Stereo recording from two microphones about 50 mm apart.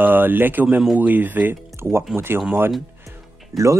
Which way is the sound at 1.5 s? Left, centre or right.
Right.